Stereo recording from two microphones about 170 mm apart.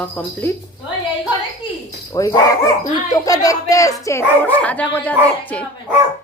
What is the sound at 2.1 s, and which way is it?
A woman's voice, 20° left (ahead or behind).